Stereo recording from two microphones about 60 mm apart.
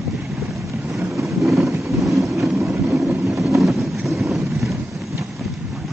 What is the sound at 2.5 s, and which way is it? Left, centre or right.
Vehicle, right.